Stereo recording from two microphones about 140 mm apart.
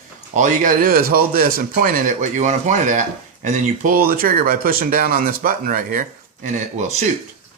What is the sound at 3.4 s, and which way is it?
Speech, 75° right (ahead or behind).